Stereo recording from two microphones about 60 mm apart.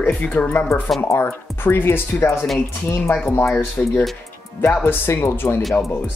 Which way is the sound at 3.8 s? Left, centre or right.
Centre.